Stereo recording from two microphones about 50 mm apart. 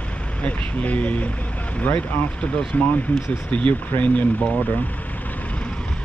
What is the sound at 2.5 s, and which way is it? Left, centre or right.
Speech, left.